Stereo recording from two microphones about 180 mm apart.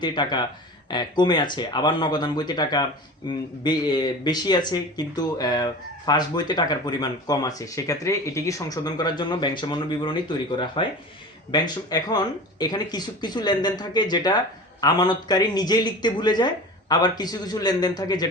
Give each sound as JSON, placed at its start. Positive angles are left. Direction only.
{"t": 0.0, "sound": "speech", "side_deg": 25}